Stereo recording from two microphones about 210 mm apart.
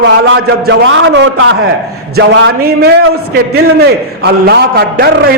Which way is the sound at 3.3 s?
50° right (ahead or behind).